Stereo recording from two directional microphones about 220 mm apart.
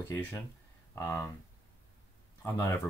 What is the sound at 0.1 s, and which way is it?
Speech, 10° left (ahead or behind).